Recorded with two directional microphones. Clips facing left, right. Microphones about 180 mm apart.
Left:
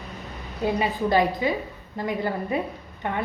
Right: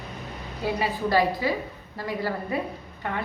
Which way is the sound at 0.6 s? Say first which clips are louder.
Left 3 dB; 20° left (ahead or behind).